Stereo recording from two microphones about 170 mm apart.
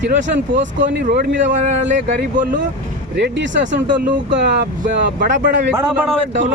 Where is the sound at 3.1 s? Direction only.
90° right.